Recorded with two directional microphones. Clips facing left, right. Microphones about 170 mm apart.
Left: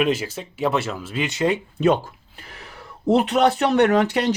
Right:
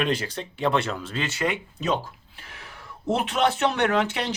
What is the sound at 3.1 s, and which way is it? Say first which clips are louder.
Speech: left 6 dB; 40° left (ahead or behind).